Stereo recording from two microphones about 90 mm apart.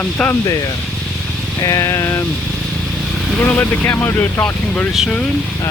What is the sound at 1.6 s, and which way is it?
Vehicle, 40° left (ahead or behind).